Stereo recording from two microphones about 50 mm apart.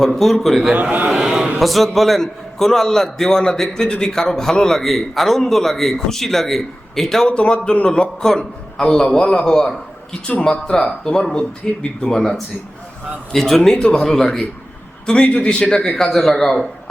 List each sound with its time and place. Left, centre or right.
0.0 s a man's voice: centre
0.7 s a man's voice: right
1.1 s a sound: centre
1.5 s a man's voice: centre
15.0 s a man's voice: centre